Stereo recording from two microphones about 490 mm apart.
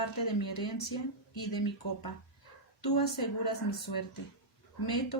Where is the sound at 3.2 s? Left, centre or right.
Left.